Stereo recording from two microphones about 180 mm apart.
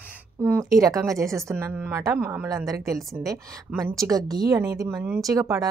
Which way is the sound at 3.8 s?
20° right (ahead or behind).